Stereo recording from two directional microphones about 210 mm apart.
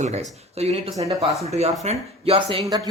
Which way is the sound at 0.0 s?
35° right (ahead or behind).